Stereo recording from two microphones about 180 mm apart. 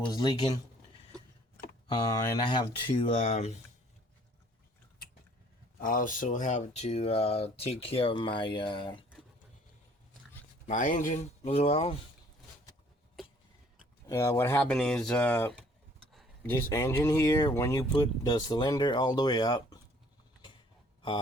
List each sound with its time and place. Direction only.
0.1 s speech: 20° left (ahead or behind)
1.9 s speech: 20° left (ahead or behind); by 3.6 s 40° left (ahead or behind)
5.8 s speech: 50° left (ahead or behind); by 9.0 s 25° left (ahead or behind)
10.7 s speech: 45° left (ahead or behind)
14.1 s speech: 15° left (ahead or behind)